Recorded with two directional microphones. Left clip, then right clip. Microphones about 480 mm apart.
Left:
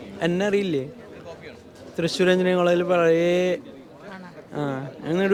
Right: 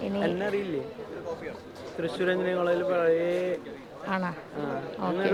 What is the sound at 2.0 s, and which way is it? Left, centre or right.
A man's voice, left.